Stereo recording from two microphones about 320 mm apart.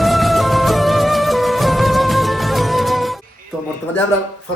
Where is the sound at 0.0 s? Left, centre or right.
Centre.